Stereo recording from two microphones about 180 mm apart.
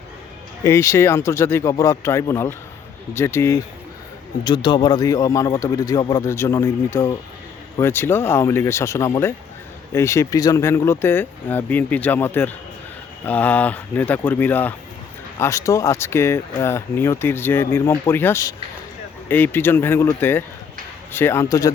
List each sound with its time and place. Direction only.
0.6 s speech: 15° left (ahead or behind)